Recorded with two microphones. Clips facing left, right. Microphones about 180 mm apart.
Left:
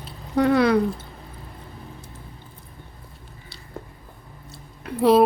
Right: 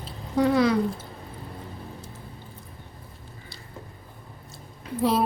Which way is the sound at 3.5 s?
65° left (ahead or behind).